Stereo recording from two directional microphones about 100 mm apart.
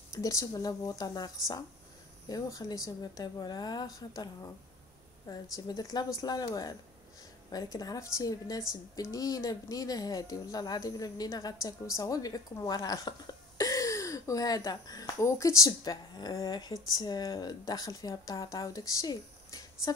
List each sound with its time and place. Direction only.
0.1 s a woman's voice: 35° left (ahead or behind)